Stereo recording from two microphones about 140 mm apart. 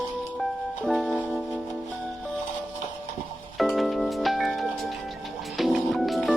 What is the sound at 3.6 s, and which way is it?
Music, centre (ahead or behind).